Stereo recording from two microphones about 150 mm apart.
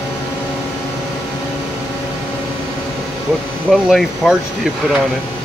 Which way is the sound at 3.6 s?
Centre (ahead or behind).